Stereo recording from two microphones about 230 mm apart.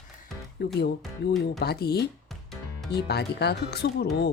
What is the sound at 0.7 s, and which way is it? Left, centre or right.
Speech, left.